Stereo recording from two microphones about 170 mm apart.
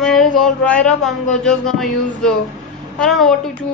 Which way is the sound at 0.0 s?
Centre (ahead or behind).